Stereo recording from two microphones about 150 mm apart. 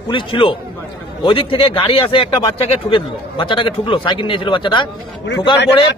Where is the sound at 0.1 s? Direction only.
35° left (ahead or behind).